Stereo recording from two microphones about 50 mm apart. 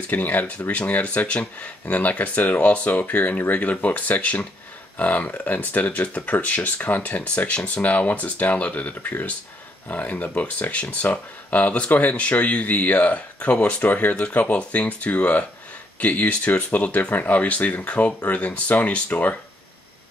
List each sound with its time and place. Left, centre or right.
0.1 s speech: left